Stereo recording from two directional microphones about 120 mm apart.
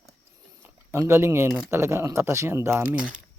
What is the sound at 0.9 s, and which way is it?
A man's voice, 25° right (ahead or behind).